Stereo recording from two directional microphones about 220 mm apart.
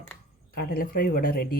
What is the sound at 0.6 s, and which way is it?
Speech, 40° left (ahead or behind).